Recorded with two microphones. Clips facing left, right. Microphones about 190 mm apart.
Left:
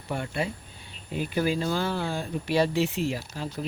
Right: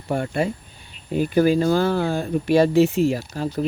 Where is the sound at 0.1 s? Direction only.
45° right (ahead or behind).